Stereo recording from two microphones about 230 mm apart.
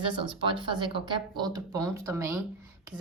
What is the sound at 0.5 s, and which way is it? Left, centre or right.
A woman's voice, right.